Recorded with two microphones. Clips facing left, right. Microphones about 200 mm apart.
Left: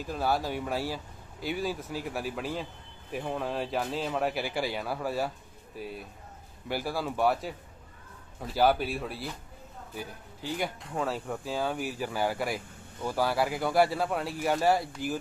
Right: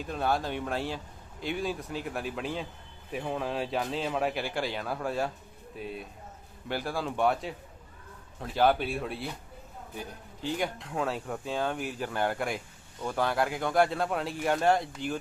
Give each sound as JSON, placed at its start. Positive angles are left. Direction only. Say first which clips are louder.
{"t": 0.0, "sound": "speech", "louder": "even", "side_deg": 5}
{"t": 10.6, "sound": "speech", "louder": "left 1 dB", "side_deg": 0}